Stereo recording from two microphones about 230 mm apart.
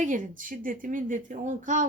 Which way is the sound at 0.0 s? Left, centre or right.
Right.